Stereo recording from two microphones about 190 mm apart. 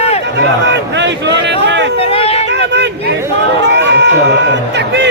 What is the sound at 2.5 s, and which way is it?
Speech, 65° right (ahead or behind).